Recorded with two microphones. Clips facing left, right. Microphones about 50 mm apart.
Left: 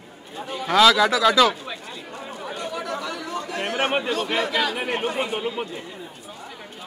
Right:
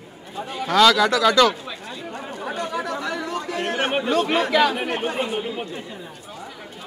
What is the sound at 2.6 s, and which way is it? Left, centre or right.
Chatter, right.